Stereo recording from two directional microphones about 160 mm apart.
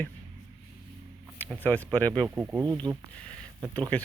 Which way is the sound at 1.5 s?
10° left (ahead or behind).